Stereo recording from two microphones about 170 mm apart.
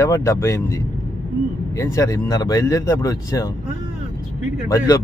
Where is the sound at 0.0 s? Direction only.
15° left (ahead or behind).